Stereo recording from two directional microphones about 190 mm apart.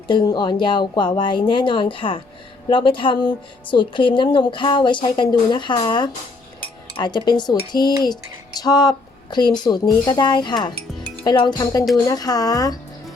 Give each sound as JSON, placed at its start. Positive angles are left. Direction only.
{"t": 0.1, "sound": "speech", "side_deg": 25}